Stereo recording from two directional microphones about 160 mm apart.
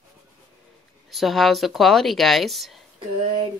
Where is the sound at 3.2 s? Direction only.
35° right (ahead or behind).